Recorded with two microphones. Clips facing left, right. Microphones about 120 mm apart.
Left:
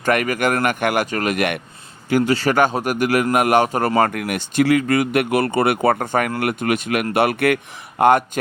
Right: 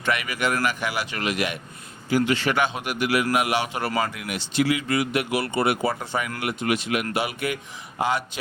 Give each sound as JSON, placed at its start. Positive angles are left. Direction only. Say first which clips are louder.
{"t": 0.0, "sound": "speech", "louder": "left 7 dB", "side_deg": 50}
{"t": 2.2, "sound": "a man's voice", "louder": "left 6 dB", "side_deg": 40}